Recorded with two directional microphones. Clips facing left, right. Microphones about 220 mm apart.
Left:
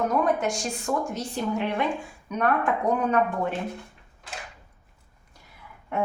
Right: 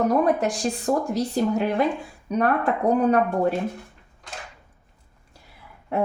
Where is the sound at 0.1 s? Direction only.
35° right (ahead or behind).